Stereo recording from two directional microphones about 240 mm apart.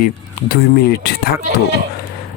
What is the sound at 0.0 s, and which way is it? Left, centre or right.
Speech, left.